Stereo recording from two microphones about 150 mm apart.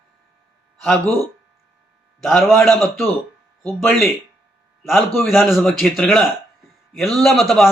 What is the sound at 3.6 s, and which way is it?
Speech, 10° left (ahead or behind).